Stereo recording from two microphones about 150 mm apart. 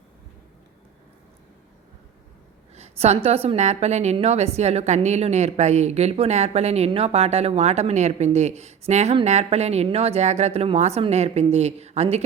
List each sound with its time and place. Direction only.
2.7 s a woman's voice: 45° right (ahead or behind)